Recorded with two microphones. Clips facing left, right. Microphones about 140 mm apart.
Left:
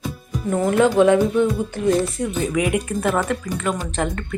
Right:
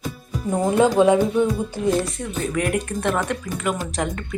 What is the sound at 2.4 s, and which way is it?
Speech, 5° left (ahead or behind).